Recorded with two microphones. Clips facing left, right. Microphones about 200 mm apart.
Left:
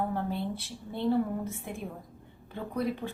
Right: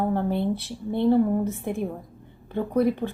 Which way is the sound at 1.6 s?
55° right (ahead or behind).